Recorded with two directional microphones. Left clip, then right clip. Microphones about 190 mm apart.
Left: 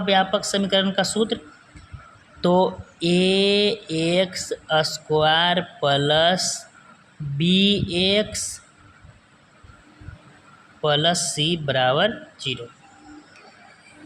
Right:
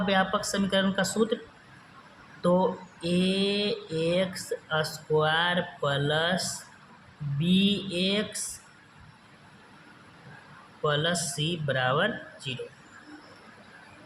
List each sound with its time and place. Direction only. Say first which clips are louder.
0.0 s speech: left 6 dB; 30° left (ahead or behind)
2.4 s speech: left 6 dB; 35° left (ahead or behind)
10.8 s speech: left 7 dB; 35° left (ahead or behind)